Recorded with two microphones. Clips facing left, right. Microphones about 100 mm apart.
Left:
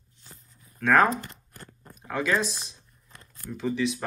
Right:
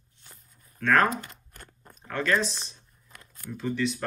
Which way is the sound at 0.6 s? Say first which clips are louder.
Left 2 dB; 5° left (ahead or behind).